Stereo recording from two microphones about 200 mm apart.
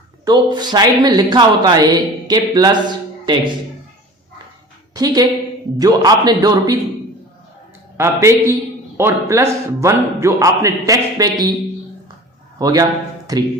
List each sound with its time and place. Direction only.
0.3 s a man's voice: 20° right (ahead or behind)
4.9 s a man's voice: 20° right (ahead or behind)
7.9 s a man's voice: 15° right (ahead or behind)
12.5 s speech: 20° right (ahead or behind)